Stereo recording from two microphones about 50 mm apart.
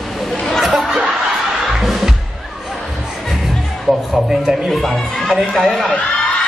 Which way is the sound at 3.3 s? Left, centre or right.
Centre.